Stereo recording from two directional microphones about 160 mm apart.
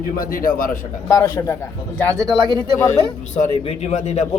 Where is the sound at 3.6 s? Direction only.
45° left (ahead or behind).